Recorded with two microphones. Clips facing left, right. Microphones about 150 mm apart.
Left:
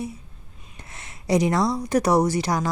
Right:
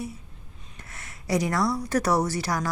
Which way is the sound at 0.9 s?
20° left (ahead or behind).